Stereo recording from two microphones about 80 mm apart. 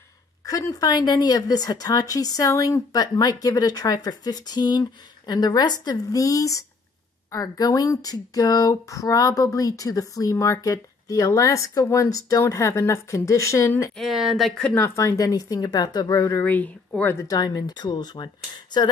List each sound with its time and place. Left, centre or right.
0.5 s a woman's voice: left
13.9 s speech: centre
15.0 s a woman's voice: left
16.3 s speech: left
17.3 s speech: left